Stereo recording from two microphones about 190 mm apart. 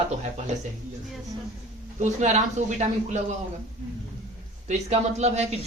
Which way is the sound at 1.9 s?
40° right (ahead or behind).